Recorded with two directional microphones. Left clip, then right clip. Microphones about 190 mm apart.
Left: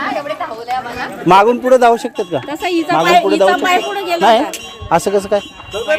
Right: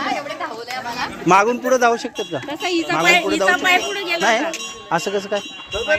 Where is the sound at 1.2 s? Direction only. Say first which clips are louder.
Left 6 dB; 35° left (ahead or behind).